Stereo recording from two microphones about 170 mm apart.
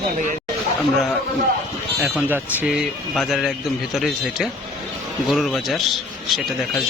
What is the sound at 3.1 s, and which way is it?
A man's voice, centre (ahead or behind).